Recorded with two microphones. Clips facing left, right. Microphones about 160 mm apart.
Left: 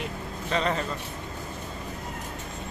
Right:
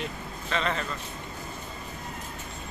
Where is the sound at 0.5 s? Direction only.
40° left (ahead or behind).